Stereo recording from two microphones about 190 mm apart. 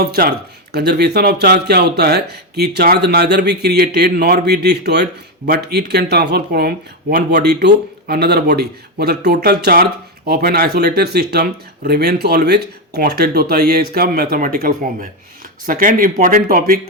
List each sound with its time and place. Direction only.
0.0 s speech: 55° right (ahead or behind)